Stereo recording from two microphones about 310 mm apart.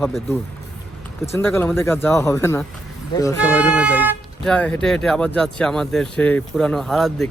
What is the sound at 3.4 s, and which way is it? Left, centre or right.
Speech, centre.